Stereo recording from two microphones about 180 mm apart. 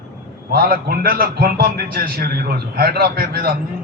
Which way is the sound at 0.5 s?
60° right (ahead or behind).